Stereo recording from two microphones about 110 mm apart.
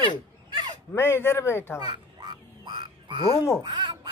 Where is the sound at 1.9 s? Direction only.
40° right (ahead or behind).